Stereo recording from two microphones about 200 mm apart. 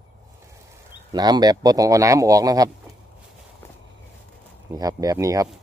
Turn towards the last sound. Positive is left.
turn(degrees=-15)  # may be behind; listen again after turning